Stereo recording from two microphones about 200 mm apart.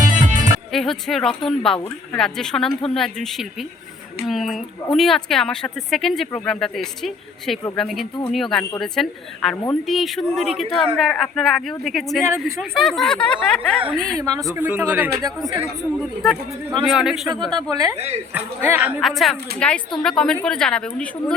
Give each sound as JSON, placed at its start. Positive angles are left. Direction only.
{"t": 0.0, "sound": "music", "side_deg": -40}
{"t": 0.7, "sound": "a woman's voice", "side_deg": 0}
{"t": 14.2, "sound": "speech", "side_deg": -20}
{"t": 16.2, "sound": "a woman's voice", "side_deg": 0}
{"t": 17.7, "sound": "speech", "side_deg": -20}
{"t": 17.9, "sound": "speech", "side_deg": -30}
{"t": 18.3, "sound": "a woman's voice", "side_deg": -10}